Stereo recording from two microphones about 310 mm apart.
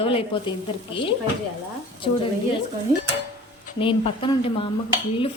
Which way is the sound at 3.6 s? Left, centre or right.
Centre.